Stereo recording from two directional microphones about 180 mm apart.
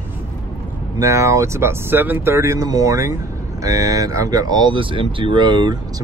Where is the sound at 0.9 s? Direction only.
15° right (ahead or behind).